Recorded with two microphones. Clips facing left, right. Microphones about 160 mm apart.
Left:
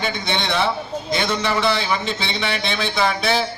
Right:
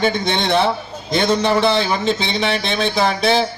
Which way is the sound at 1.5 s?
30° right (ahead or behind).